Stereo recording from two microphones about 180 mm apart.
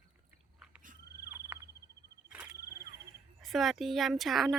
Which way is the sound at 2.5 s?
60° left (ahead or behind).